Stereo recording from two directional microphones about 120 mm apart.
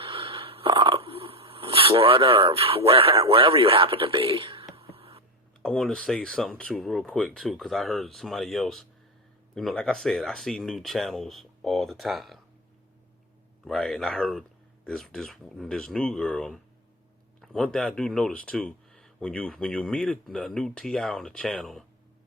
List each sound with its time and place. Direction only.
0.0 s a sound: 50° right (ahead or behind)
3.2 s speech: 50° right (ahead or behind)
4.7 s beatboxing: 55° right (ahead or behind)
5.6 s speech: 5° left (ahead or behind)
13.7 s speech: 5° left (ahead or behind)